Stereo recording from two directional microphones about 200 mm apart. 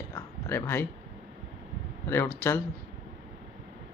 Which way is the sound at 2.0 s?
10° left (ahead or behind).